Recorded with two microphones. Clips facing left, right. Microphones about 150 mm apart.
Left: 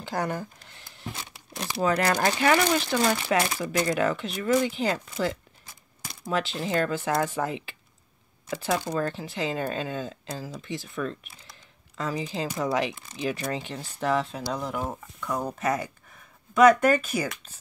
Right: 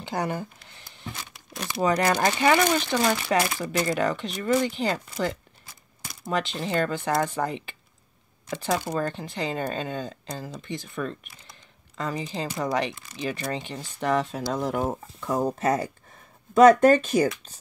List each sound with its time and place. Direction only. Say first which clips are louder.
0.0 s speech: right 1 dB; centre (ahead or behind)
14.8 s speech: right 4 dB; 25° right (ahead or behind)